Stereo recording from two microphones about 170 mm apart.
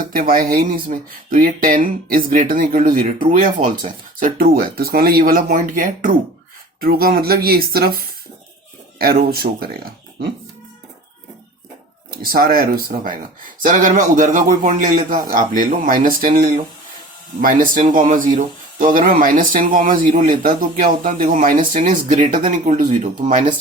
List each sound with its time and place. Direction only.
0.0 s speech: 55° right (ahead or behind)
12.1 s speech: 60° right (ahead or behind)